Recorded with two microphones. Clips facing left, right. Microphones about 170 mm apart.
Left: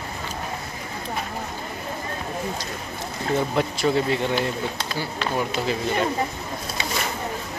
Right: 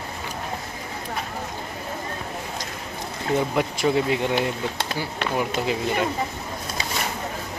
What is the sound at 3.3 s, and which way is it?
Speech, 15° right (ahead or behind).